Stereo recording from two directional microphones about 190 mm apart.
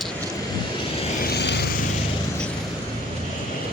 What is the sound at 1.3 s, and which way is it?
Vehicle, 60° left (ahead or behind).